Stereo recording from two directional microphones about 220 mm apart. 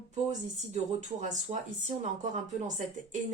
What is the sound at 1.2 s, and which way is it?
A woman's voice, 30° right (ahead or behind).